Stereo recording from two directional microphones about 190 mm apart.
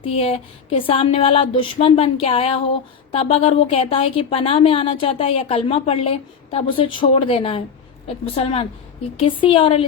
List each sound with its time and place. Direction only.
0.0 s a woman's voice: 30° left (ahead or behind)